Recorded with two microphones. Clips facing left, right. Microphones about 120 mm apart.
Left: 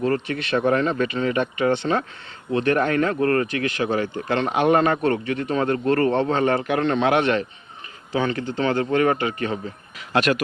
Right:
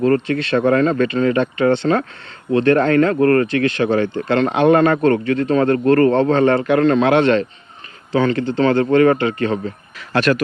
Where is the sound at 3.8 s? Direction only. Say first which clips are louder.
Right 6 dB; 65° right (ahead or behind).